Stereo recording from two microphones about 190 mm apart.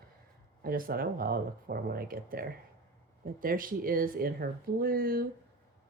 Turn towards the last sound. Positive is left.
turn(degrees=-50)  # may be behind; listen again after turning